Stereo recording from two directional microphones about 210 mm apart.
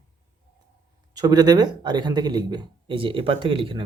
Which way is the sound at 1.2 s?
20° right (ahead or behind).